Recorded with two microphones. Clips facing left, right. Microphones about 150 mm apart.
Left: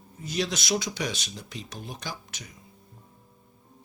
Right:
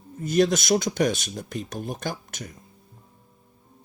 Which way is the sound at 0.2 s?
50° right (ahead or behind).